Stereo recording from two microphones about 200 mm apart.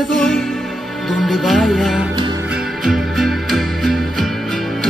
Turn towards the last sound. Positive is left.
turn(degrees=0)  # may be behind; listen again after turning